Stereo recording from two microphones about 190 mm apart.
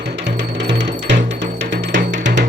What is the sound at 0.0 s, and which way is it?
Music, 65° right (ahead or behind).